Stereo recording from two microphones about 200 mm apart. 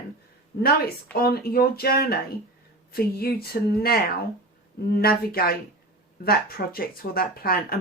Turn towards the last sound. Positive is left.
turn(degrees=50)  # may be behind; listen again after turning